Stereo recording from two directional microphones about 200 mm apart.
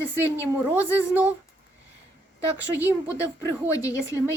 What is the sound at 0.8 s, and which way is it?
Speech, 10° left (ahead or behind).